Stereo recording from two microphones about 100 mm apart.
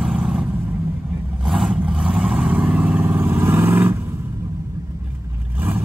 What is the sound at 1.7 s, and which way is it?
Vehicle, 15° right (ahead or behind).